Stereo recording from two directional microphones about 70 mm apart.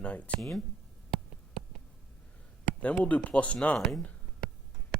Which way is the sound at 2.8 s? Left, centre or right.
Centre.